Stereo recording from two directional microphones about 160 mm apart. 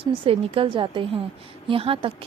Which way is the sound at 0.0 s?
35° right (ahead or behind).